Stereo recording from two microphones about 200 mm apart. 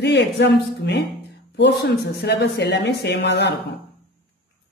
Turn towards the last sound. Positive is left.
turn(degrees=60)  # may be behind; listen again after turning